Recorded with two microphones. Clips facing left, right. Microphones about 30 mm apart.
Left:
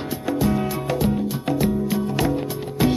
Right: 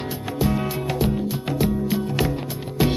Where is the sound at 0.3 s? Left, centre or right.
Centre.